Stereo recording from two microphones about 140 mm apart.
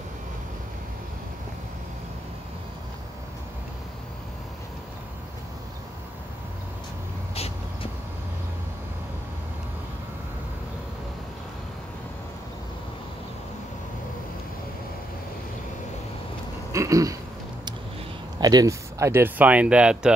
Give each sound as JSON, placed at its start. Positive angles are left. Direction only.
{"t": 7.3, "sound": "cat", "side_deg": 45}
{"t": 16.7, "sound": "a sound", "side_deg": -20}
{"t": 18.4, "sound": "speech", "side_deg": -25}